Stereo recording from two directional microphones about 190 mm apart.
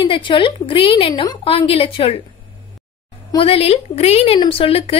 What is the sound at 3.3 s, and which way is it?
Speech, 30° left (ahead or behind).